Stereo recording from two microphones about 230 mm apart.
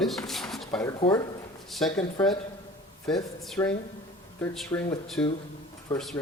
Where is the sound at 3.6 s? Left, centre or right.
Centre.